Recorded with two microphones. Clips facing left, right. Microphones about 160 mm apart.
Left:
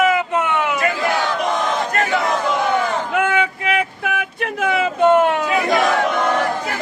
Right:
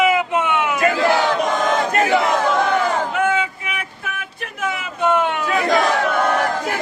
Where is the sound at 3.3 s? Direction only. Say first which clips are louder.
Left 4 dB; 65° left (ahead or behind).